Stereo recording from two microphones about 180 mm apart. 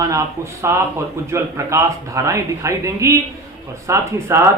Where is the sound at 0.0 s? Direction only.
15° right (ahead or behind).